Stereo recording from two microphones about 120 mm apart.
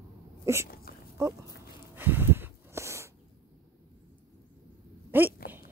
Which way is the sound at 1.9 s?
15° right (ahead or behind).